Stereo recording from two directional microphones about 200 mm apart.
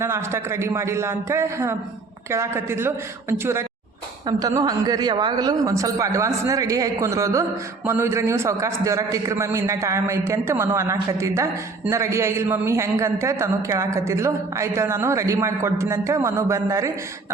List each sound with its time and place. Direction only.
0.0 s a man's voice: 15° right (ahead or behind)